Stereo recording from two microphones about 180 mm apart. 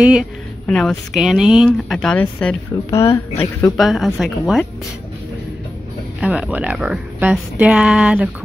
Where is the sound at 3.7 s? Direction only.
Centre (ahead or behind).